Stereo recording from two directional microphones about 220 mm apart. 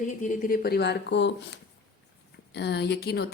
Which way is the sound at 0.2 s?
40° left (ahead or behind).